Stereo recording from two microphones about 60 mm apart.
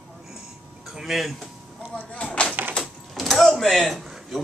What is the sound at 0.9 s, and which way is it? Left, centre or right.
Speech, centre.